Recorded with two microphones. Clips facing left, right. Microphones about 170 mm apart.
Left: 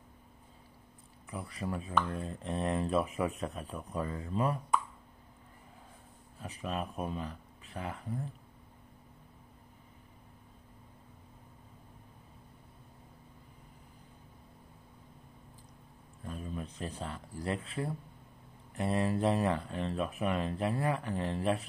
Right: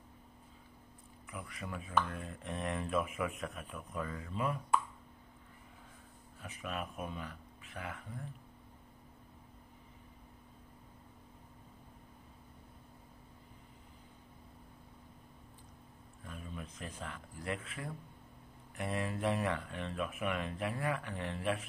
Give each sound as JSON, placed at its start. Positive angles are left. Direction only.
{"t": 1.3, "sound": "speech", "side_deg": 35}
{"t": 6.4, "sound": "speech", "side_deg": 35}
{"t": 16.3, "sound": "speech", "side_deg": 35}